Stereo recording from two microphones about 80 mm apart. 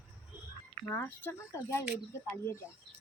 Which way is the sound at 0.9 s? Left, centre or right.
Left.